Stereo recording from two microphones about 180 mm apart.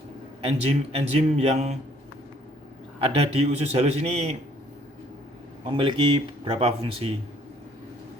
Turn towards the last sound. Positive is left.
turn(degrees=-30)  # may be behind; listen again after turning